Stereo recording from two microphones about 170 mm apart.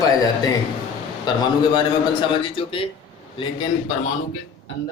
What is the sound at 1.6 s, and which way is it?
Speech, 25° left (ahead or behind).